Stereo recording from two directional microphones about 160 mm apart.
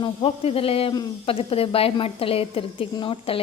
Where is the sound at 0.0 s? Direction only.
35° left (ahead or behind).